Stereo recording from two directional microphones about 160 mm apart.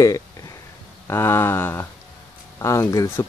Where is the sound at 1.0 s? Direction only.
15° left (ahead or behind).